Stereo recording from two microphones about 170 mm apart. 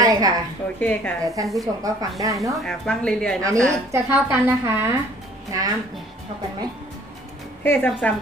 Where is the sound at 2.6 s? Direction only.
5° left (ahead or behind).